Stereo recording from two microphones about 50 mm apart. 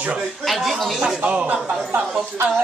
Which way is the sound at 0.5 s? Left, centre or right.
Centre.